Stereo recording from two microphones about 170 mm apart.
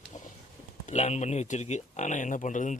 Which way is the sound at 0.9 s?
40° left (ahead or behind).